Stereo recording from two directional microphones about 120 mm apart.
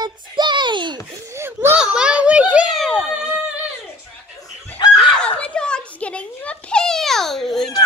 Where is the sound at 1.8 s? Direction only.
10° right (ahead or behind).